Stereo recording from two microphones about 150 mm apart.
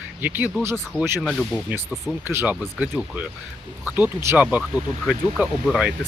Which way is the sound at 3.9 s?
10° right (ahead or behind).